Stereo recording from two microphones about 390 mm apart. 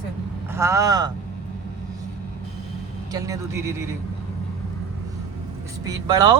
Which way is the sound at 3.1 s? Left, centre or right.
Centre.